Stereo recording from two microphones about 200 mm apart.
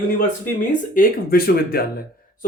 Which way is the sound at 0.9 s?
45° left (ahead or behind).